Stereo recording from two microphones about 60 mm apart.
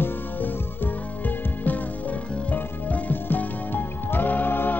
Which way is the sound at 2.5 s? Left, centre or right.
Left.